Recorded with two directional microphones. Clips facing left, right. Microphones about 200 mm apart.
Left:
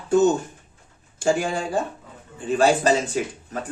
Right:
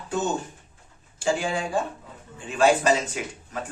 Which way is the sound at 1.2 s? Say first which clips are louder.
Left 3 dB; 45° left (ahead or behind).